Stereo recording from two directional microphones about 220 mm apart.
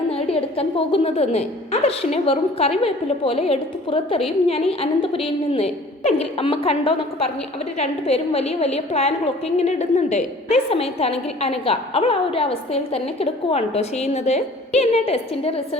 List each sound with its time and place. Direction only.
0.1 s a woman's voice: 25° left (ahead or behind)